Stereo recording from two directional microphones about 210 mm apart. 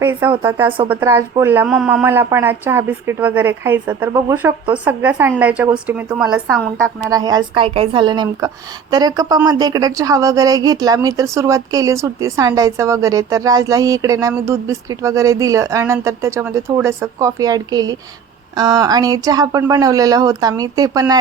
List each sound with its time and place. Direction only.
0.0 s speech: 10° right (ahead or behind)
7.1 s speech: 15° right (ahead or behind)